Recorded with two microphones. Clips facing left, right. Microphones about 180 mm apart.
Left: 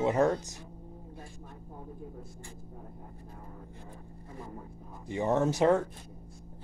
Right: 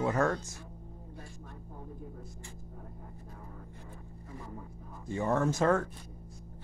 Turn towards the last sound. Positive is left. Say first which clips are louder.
# left 2 dB
turn(degrees=20)  # may be behind; listen again after turning